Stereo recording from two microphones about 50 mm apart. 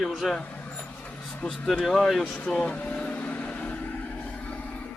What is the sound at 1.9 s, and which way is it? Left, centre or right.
Speech, centre.